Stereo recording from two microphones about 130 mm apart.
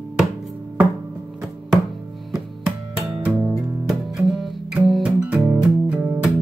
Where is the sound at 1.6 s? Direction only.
Centre (ahead or behind).